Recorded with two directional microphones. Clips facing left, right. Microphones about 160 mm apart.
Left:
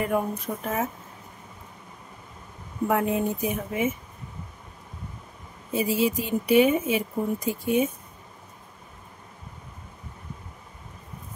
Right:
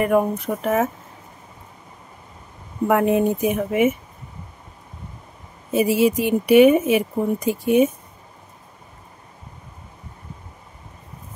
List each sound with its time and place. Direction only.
0.0 s speech: 70° right (ahead or behind)
2.9 s speech: 70° right (ahead or behind)
5.7 s speech: 75° right (ahead or behind)